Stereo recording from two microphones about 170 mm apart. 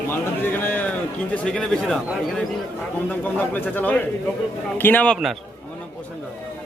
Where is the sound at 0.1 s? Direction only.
10° left (ahead or behind).